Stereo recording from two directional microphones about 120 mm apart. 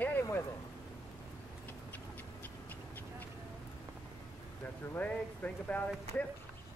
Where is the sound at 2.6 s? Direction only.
15° left (ahead or behind).